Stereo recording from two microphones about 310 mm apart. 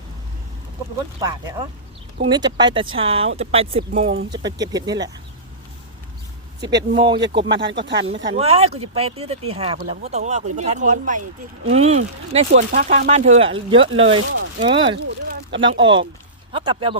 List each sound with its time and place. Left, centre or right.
1.2 s speech: centre
6.7 s speech: right
8.0 s speech: centre
14.9 s speech: right
15.8 s speech: centre